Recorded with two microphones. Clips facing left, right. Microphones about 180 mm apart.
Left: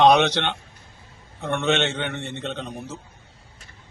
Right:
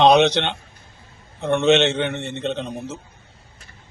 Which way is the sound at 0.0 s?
20° right (ahead or behind).